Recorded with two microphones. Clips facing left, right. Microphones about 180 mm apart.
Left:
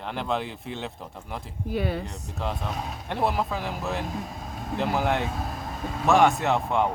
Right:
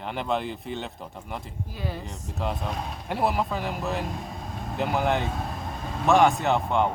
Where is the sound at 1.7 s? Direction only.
70° left (ahead or behind).